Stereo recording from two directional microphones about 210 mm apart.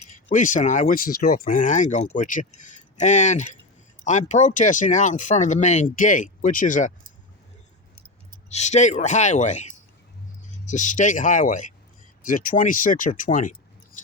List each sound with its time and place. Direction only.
0.3 s speech: 35° left (ahead or behind)
8.4 s speech: 30° left (ahead or behind)
10.7 s speech: 35° left (ahead or behind)